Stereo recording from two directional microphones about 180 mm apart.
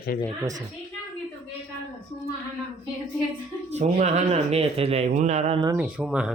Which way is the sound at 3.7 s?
40° right (ahead or behind).